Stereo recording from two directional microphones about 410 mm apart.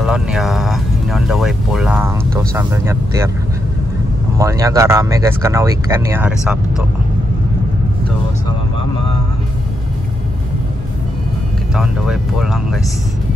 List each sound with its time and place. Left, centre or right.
0.0 s music: centre
4.4 s speech: centre
11.7 s speech: centre